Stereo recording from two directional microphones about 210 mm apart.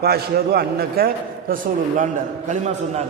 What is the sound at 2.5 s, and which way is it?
Speech, 35° right (ahead or behind).